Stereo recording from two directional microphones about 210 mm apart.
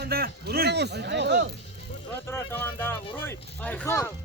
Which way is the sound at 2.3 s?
10° left (ahead or behind).